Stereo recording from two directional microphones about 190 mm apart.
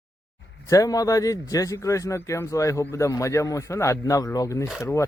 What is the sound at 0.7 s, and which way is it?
Speech, 20° left (ahead or behind).